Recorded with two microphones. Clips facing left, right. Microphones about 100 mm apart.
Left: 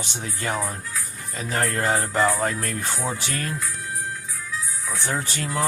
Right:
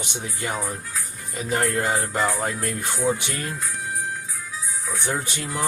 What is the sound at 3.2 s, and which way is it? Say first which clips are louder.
Speech: left 1 dB; 20° right (ahead or behind).